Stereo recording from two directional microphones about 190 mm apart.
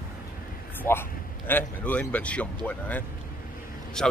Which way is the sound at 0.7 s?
10° left (ahead or behind).